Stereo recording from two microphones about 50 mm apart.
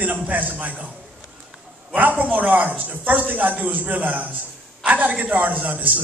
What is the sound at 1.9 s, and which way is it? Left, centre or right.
A man's voice, right.